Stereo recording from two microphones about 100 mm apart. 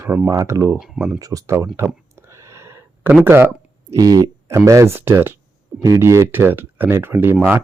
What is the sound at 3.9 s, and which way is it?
Speech, 35° right (ahead or behind).